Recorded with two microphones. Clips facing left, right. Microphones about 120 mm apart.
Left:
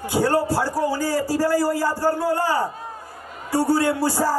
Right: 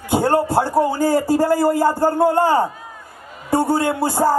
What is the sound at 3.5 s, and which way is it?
Speech, 25° right (ahead or behind).